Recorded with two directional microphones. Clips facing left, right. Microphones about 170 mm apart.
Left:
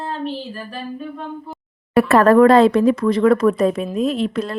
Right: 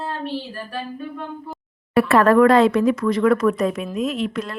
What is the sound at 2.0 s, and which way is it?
Speech, 40° left (ahead or behind).